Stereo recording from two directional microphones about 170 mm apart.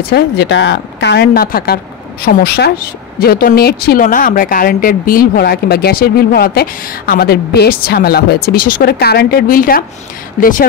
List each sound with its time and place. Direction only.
0.1 s speech: 90° left; by 10.7 s 55° left (ahead or behind)